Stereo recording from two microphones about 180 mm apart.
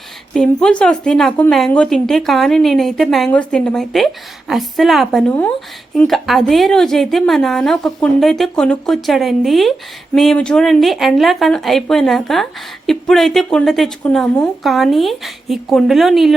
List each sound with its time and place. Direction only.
0.3 s a woman's voice: 5° left (ahead or behind)